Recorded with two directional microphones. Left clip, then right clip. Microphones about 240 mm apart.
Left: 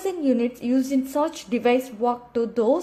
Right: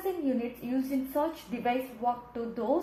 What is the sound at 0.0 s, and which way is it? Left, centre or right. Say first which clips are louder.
A woman's voice: left 8 dB; left.